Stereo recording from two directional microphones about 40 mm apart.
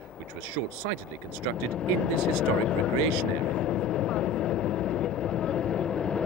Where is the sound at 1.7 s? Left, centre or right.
Centre.